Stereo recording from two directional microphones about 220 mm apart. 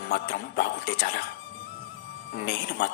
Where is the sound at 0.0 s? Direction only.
45° left (ahead or behind).